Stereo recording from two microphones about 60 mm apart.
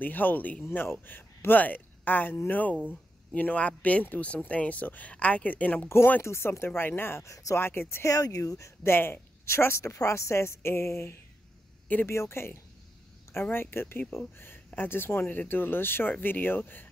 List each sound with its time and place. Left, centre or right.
0.0 s speech: left
6.2 s a woman's voice: left
7.2 s speech: left
7.5 s a woman's voice: left
8.1 s speech: left
8.5 s speech: left
8.8 s speech: left
9.9 s a woman's voice: left